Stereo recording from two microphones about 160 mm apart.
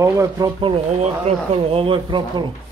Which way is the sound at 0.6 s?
40° right (ahead or behind).